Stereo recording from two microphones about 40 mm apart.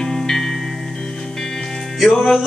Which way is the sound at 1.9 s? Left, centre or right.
Centre.